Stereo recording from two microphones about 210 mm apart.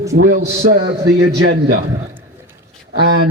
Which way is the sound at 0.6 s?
55° right (ahead or behind).